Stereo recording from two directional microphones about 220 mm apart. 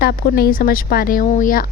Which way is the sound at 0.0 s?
45° left (ahead or behind).